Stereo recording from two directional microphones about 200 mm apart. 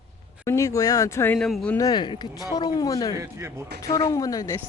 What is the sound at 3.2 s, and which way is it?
Speech, 15° right (ahead or behind).